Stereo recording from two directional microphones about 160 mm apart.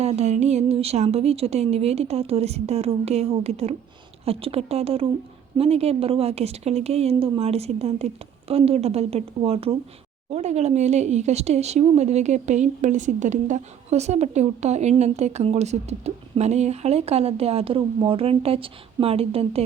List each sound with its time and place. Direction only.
0.0 s a woman's voice: 45° right (ahead or behind)